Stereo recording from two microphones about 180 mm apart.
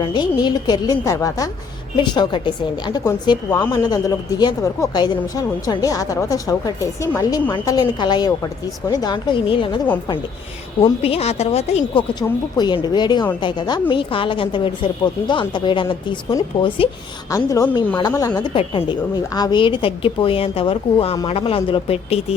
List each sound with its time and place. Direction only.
0.0 s a woman's voice: 25° left (ahead or behind)
10.8 s speech: 35° left (ahead or behind)
12.5 s a woman's voice: 25° left (ahead or behind)
17.3 s a woman's voice: 20° left (ahead or behind); by 22.4 s 35° left (ahead or behind)